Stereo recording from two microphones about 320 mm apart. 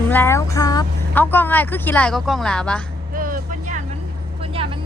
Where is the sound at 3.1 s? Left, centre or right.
Right.